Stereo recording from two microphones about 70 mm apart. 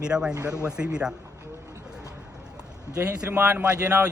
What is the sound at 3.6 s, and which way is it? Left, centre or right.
Speech, centre.